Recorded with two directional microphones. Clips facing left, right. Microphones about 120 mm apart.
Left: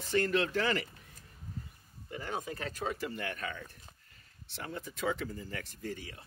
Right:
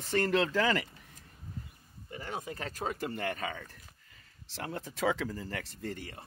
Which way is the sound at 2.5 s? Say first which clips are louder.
Even; 35° right (ahead or behind).